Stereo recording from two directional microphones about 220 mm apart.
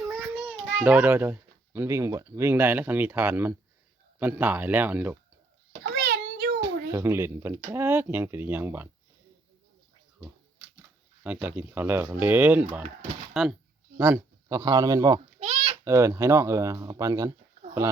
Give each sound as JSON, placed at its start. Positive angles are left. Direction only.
{"t": 0.8, "sound": "speech", "side_deg": -10}
{"t": 5.8, "sound": "a sound", "side_deg": -40}
{"t": 6.6, "sound": "speech", "side_deg": -10}
{"t": 11.2, "sound": "speech", "side_deg": -5}
{"t": 14.0, "sound": "speech", "side_deg": -15}
{"t": 15.4, "sound": "a sound", "side_deg": -30}
{"t": 15.8, "sound": "speech", "side_deg": -15}